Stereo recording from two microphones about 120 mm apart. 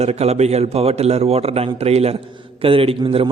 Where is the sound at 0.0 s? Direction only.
60° right (ahead or behind).